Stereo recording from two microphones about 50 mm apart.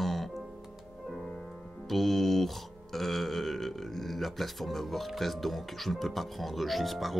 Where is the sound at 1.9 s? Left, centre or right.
Centre.